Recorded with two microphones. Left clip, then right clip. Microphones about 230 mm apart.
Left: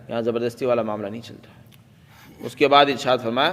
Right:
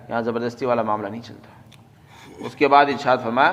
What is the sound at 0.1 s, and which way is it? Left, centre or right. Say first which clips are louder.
A man's voice: even; left.